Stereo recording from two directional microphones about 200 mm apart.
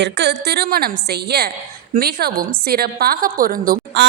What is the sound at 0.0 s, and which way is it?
A woman's voice, 60° right (ahead or behind).